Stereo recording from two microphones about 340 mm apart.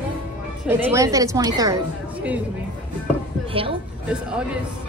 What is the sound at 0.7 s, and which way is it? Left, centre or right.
Speech, centre.